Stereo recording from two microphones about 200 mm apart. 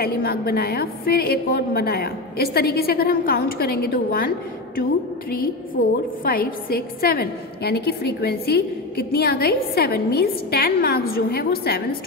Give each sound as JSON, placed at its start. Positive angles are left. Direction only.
{"t": 0.0, "sound": "a woman's voice", "side_deg": 50}
{"t": 6.2, "sound": "a woman's voice", "side_deg": 45}